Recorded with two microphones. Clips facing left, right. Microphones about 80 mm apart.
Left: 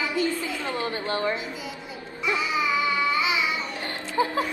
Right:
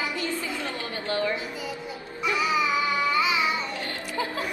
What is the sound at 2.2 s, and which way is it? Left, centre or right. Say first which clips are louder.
Music: right 1 dB; left.